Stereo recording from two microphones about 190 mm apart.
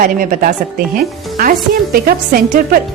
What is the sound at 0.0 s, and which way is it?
A woman's voice, 45° right (ahead or behind).